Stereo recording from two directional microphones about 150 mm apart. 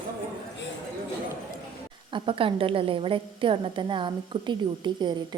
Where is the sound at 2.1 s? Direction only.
35° right (ahead or behind).